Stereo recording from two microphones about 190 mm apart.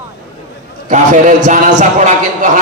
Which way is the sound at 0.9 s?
40° right (ahead or behind).